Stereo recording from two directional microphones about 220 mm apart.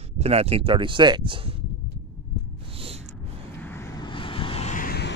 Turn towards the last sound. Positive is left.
turn(degrees=45)  # may be behind; listen again after turning